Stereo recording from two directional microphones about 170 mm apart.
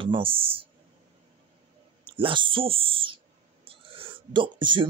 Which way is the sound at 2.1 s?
30° right (ahead or behind).